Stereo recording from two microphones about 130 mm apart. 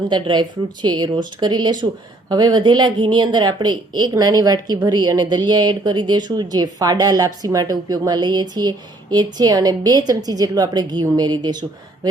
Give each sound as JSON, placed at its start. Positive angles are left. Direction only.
{"t": 0.1, "sound": "a woman's voice", "side_deg": -35}